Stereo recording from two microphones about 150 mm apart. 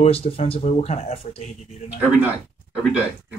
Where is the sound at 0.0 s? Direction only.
45° left (ahead or behind).